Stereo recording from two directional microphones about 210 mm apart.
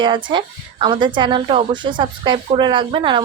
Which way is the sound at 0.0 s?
20° right (ahead or behind).